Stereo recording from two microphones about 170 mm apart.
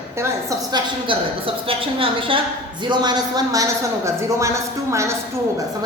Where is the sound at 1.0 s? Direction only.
30° right (ahead or behind).